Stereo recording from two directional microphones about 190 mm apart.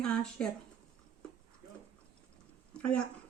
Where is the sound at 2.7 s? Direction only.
5° left (ahead or behind).